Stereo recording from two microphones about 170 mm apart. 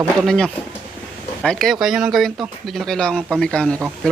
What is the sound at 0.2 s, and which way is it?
Speech, 5° left (ahead or behind).